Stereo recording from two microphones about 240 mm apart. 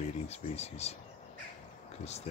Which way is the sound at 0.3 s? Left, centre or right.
Left.